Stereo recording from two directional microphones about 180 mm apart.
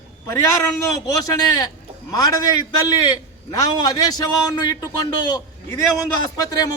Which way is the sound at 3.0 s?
20° left (ahead or behind).